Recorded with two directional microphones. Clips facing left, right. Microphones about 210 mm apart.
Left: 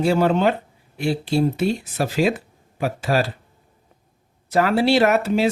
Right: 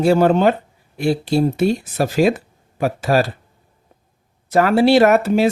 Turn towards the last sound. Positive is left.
turn(degrees=-50)  # may be behind; listen again after turning